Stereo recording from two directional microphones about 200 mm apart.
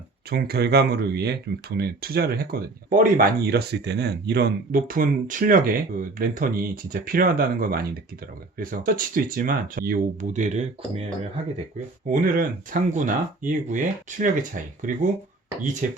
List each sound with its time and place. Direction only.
0.3 s speech: 50° right (ahead or behind); by 11.1 s 35° right (ahead or behind)
12.2 s speech: 40° right (ahead or behind)